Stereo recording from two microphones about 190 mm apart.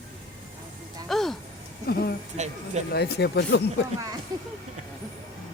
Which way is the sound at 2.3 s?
40° right (ahead or behind).